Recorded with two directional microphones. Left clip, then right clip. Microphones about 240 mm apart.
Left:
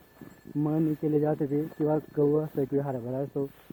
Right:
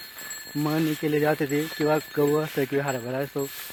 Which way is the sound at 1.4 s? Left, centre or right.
Right.